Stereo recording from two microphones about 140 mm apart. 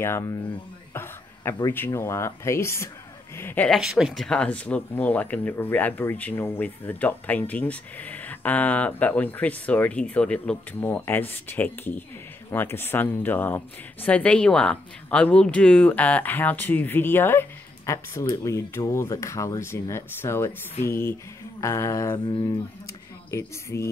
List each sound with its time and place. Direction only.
0.0 s speech: 20° left (ahead or behind)
0.9 s a sound: 15° left (ahead or behind)
1.9 s speech: 20° left (ahead or behind)
3.6 s speech: centre (ahead or behind); by 22.2 s 20° left (ahead or behind)
22.3 s speech: 35° left (ahead or behind)
23.3 s speech: 20° left (ahead or behind)